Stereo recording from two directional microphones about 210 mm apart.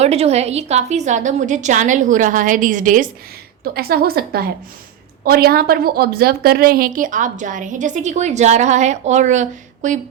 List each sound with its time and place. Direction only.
0.0 s a woman's voice: 30° right (ahead or behind)